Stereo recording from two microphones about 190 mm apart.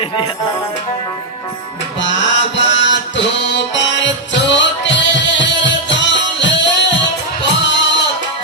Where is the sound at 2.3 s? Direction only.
70° left (ahead or behind).